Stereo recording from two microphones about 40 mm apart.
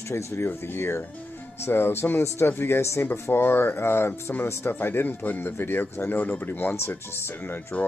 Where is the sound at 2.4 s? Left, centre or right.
Left.